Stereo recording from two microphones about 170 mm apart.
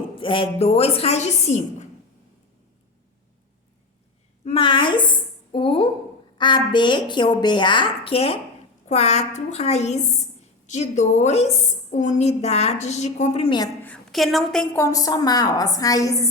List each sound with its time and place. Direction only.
0.2 s a woman's voice: 30° left (ahead or behind)
4.4 s a woman's voice: 30° left (ahead or behind)
13.8 s a woman's voice: 5° left (ahead or behind)
14.8 s a woman's voice: 20° left (ahead or behind)